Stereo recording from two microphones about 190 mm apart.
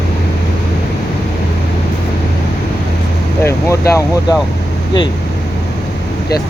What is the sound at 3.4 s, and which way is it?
Speech, 15° left (ahead or behind).